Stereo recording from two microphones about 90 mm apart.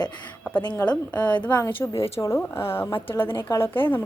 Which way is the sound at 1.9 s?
90° left.